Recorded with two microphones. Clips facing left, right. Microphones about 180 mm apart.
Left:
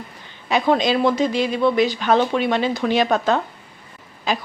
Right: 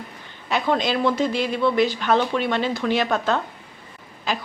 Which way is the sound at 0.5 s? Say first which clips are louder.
Left 4 dB; 15° left (ahead or behind).